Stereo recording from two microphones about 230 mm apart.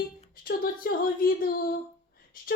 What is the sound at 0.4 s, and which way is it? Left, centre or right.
A woman's voice, left.